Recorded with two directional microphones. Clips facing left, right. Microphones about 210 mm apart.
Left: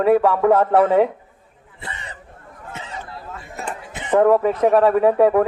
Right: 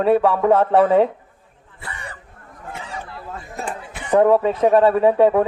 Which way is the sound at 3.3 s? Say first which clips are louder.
Right 4 dB; 35° right (ahead or behind).